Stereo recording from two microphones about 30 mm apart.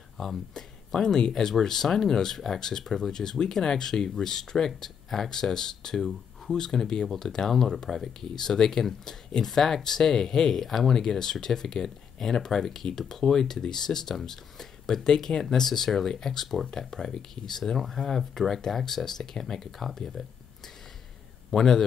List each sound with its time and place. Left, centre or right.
0.2 s speech: centre
10.6 s speech: centre
11.1 s speech: centre
16.9 s speech: centre